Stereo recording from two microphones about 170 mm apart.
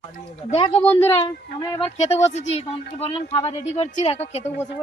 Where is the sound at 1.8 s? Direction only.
40° left (ahead or behind).